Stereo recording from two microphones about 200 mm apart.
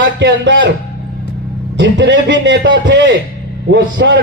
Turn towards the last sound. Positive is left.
turn(degrees=-65)  # may be behind; listen again after turning